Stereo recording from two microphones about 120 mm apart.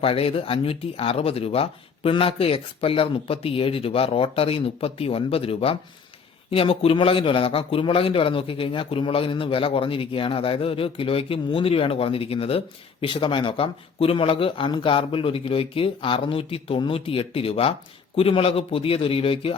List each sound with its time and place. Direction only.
0.0 s a man's voice: 50° left (ahead or behind)